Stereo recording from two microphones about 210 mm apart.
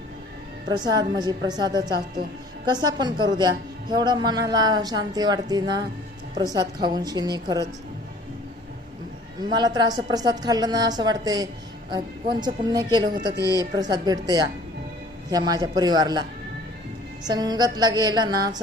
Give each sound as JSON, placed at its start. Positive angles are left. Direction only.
{"t": 0.7, "sound": "a woman's voice", "side_deg": -20}
{"t": 9.4, "sound": "a woman's voice", "side_deg": -20}
{"t": 17.2, "sound": "a woman's voice", "side_deg": -20}